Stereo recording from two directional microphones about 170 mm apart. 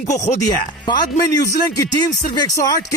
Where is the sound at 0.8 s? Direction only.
25° left (ahead or behind).